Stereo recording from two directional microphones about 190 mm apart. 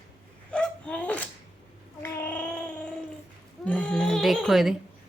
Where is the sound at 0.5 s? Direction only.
5° left (ahead or behind).